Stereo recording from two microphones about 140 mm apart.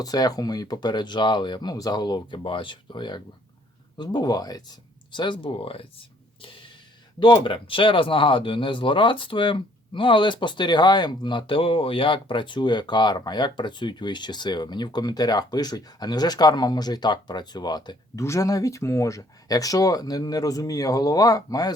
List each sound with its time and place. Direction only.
0.0 s speech: 25° left (ahead or behind)
6.4 s a sound: 40° left (ahead or behind)
7.2 s speech: 35° left (ahead or behind)